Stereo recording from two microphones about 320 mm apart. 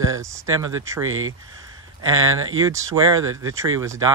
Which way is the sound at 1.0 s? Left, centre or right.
Right.